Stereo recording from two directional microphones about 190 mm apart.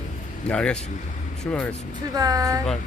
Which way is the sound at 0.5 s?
5° left (ahead or behind).